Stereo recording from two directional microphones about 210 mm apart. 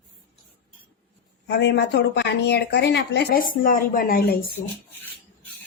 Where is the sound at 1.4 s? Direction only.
50° left (ahead or behind).